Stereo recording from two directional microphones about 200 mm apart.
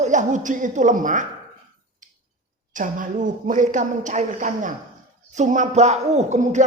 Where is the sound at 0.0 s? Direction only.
40° right (ahead or behind).